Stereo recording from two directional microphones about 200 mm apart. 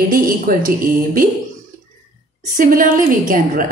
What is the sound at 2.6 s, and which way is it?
Speech, 45° right (ahead or behind).